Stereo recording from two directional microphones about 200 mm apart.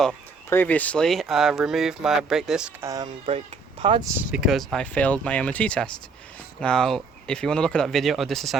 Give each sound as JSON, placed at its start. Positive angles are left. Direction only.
{"t": 0.5, "sound": "speech", "side_deg": 10}
{"t": 2.8, "sound": "speech", "side_deg": -20}
{"t": 3.2, "sound": "speech", "side_deg": -30}
{"t": 4.3, "sound": "speech", "side_deg": 0}